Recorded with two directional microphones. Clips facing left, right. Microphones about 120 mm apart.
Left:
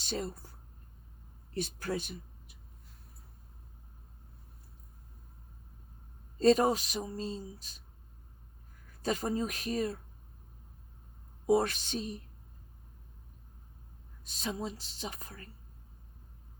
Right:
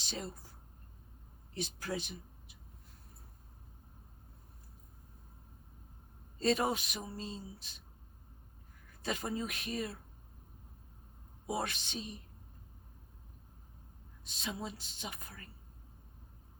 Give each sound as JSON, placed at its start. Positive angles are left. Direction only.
{"t": 1.5, "sound": "a woman's voice", "side_deg": 50}
{"t": 6.4, "sound": "speech", "side_deg": 40}
{"t": 9.0, "sound": "speech", "side_deg": 40}
{"t": 11.4, "sound": "a woman's voice", "side_deg": 40}
{"t": 14.3, "sound": "speech", "side_deg": 40}